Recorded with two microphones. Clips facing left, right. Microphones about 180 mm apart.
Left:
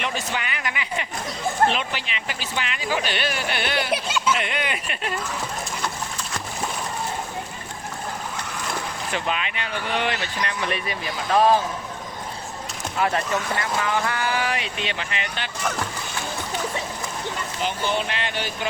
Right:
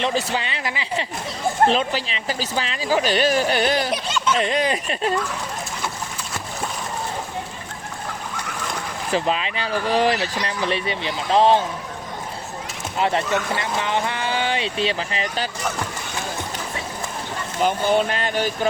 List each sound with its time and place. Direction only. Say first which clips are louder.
0.0 s speech: right 5 dB; 30° right (ahead or behind)
3.9 s speech: right 1 dB; 10° left (ahead or behind)
4.4 s speech: right 6 dB; 35° right (ahead or behind)
9.1 s speech: right 6 dB; 35° right (ahead or behind)
13.0 s speech: right 2 dB; 25° right (ahead or behind)
17.6 s speech: right 7 dB; 45° right (ahead or behind)